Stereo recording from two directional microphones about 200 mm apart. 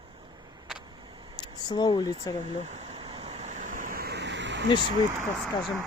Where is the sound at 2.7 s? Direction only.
30° right (ahead or behind); by 4.6 s 60° right (ahead or behind).